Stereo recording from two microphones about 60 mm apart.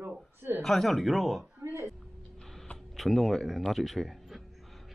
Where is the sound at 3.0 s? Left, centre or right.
Centre.